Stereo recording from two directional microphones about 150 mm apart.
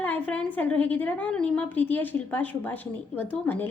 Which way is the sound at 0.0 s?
10° left (ahead or behind).